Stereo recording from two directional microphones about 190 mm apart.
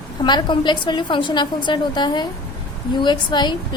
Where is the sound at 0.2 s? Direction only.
25° left (ahead or behind).